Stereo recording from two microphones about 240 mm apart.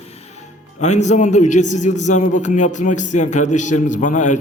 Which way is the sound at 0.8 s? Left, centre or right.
Left.